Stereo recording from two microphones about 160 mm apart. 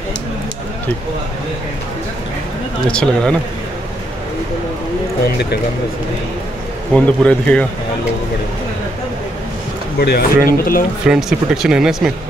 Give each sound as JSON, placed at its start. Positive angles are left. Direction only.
{"t": 2.9, "sound": "speech", "side_deg": 5}
{"t": 5.2, "sound": "speech", "side_deg": 90}
{"t": 6.9, "sound": "a man's voice", "side_deg": 5}
{"t": 9.9, "sound": "speech", "side_deg": 75}
{"t": 11.1, "sound": "speech", "side_deg": 0}